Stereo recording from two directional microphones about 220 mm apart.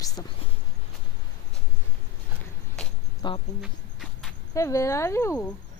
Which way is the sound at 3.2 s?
20° left (ahead or behind).